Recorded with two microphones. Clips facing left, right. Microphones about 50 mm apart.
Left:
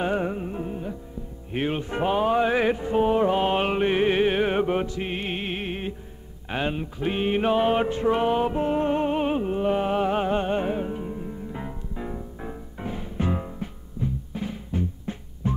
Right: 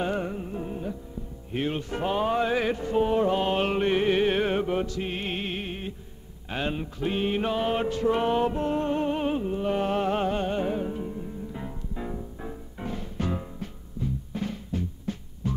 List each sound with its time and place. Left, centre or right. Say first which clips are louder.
0.0 s music: left 3 dB; left
0.7 s music: left 1 dB; centre
1.5 s music: left 2 dB; left
4.6 s music: left 3 dB; left
5.7 s music: left 4 dB; left
6.5 s music: left 3 dB; centre
8.2 s music: left 2 dB; centre; by 9.7 s left
9.7 s music: left 2 dB; centre
14.3 s music: even; centre
14.7 s music: left 2 dB; left